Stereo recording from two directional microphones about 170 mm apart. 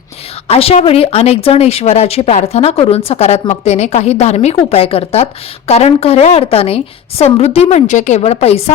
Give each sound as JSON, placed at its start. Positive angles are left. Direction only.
{"t": 0.4, "sound": "a woman's voice", "side_deg": 35}